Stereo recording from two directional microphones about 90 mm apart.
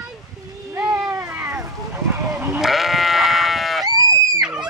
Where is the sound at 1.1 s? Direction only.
30° right (ahead or behind).